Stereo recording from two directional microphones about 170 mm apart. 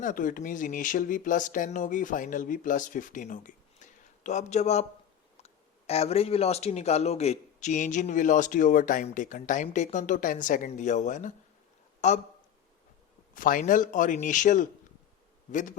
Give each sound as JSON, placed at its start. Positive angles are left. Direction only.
{"t": 0.0, "sound": "a man's voice", "side_deg": 50}
{"t": 13.3, "sound": "speech", "side_deg": 50}